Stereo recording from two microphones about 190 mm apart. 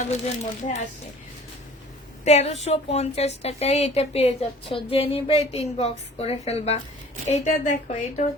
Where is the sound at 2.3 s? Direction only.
35° left (ahead or behind).